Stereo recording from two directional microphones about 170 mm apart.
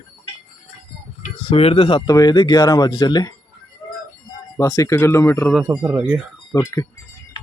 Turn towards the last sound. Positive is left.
turn(degrees=20)  # may be behind; listen again after turning